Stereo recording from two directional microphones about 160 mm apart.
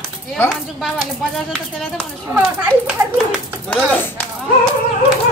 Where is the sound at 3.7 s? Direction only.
10° left (ahead or behind).